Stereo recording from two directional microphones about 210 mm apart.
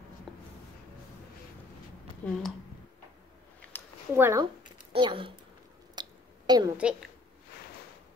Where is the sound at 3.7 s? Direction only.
10° left (ahead or behind).